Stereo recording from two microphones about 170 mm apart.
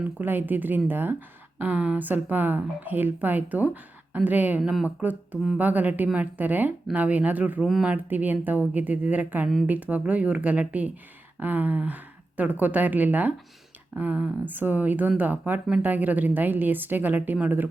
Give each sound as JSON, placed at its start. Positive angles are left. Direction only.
{"t": 0.0, "sound": "speech", "side_deg": -10}